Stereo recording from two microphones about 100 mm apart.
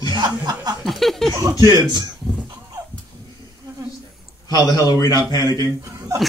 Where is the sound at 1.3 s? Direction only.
40° right (ahead or behind).